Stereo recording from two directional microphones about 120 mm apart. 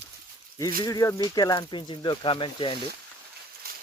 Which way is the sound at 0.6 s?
30° left (ahead or behind).